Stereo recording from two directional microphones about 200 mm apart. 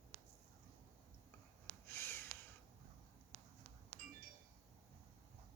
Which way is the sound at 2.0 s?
10° left (ahead or behind).